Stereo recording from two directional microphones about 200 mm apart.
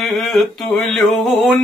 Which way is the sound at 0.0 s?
Centre (ahead or behind).